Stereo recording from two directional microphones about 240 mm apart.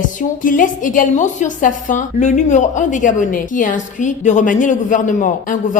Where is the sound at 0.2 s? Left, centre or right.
Left.